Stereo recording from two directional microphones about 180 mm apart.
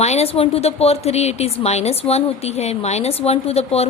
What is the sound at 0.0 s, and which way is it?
Speech, 35° left (ahead or behind).